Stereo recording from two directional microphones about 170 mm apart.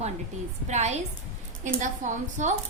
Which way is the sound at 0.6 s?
40° right (ahead or behind).